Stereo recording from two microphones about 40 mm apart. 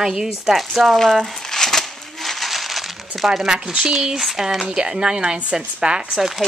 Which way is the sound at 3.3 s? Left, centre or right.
Centre.